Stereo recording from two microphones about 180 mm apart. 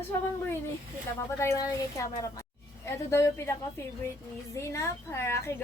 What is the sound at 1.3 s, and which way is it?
A woman's voice, 15° left (ahead or behind).